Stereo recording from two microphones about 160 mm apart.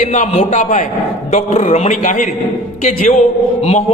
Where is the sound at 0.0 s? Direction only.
45° left (ahead or behind).